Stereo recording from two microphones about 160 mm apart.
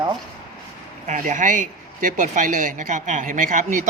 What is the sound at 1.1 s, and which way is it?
Speech, 50° right (ahead or behind).